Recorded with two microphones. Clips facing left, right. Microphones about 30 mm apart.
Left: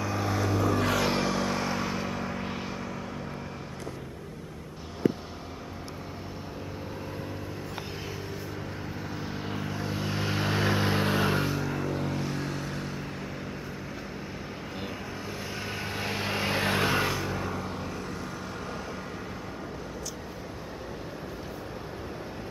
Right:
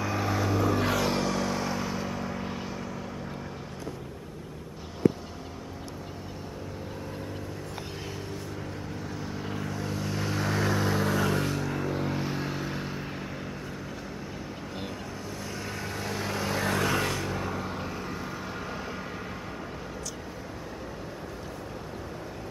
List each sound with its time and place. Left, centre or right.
0.0 s vehicle: centre
1.0 s vehicle: centre
9.2 s vehicle: centre
11.4 s vehicle: centre
15.8 s vehicle: left
17.0 s vehicle: centre